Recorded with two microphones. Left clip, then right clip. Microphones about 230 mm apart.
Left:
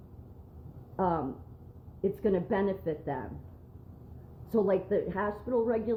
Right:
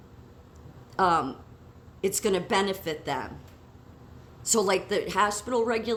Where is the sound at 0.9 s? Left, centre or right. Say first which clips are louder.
Right 7 dB; centre.